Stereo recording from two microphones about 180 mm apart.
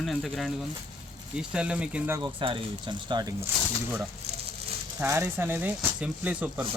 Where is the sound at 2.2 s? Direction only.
30° right (ahead or behind).